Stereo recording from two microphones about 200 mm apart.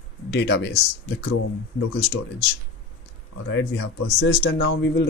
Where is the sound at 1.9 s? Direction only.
55° left (ahead or behind).